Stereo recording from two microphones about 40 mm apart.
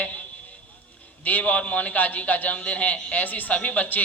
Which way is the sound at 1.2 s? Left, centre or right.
Left.